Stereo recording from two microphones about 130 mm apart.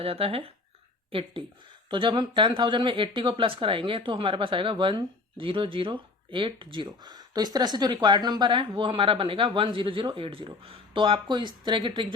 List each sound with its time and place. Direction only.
0.0 s speech: 45° right (ahead or behind)